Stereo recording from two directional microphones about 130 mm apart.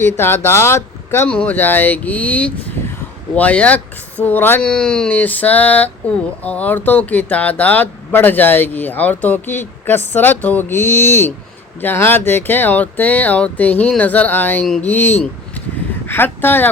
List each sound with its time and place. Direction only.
0.0 s speech: 15° left (ahead or behind)